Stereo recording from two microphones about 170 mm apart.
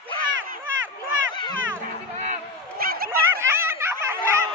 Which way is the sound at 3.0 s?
15° right (ahead or behind).